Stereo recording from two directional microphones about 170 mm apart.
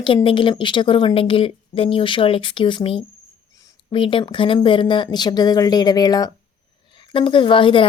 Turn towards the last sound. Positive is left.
turn(degrees=30)  # may be behind; listen again after turning